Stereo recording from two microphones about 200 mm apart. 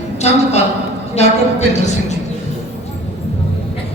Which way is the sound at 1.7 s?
35° left (ahead or behind).